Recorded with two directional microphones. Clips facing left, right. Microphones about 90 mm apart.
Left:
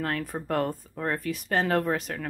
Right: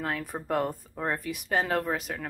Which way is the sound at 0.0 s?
10° right (ahead or behind).